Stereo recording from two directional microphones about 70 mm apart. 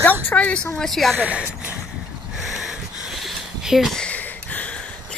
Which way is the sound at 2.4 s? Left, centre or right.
Centre.